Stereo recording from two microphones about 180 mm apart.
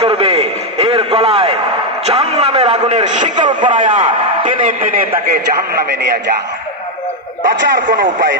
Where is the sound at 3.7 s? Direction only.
45° right (ahead or behind).